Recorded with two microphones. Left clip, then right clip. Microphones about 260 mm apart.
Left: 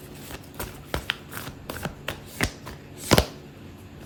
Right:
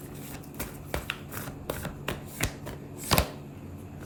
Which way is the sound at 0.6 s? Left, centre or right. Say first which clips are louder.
Left 3 dB; centre.